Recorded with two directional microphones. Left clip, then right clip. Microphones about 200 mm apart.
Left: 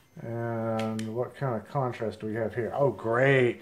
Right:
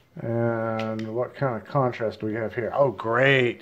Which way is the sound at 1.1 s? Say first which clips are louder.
Right 5 dB; 40° right (ahead or behind).